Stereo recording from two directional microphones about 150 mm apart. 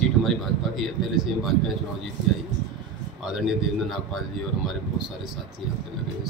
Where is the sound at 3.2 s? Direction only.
Centre (ahead or behind).